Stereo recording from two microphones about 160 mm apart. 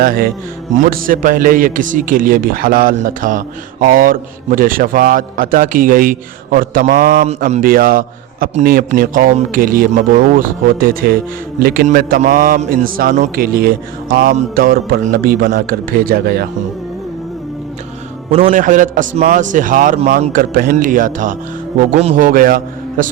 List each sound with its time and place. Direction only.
0.0 s a man's voice: 65° right (ahead or behind)
18.3 s a man's voice: 45° right (ahead or behind); by 23.0 s 60° right (ahead or behind)